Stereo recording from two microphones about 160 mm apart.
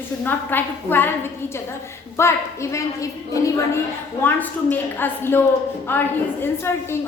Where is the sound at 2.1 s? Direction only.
15° left (ahead or behind).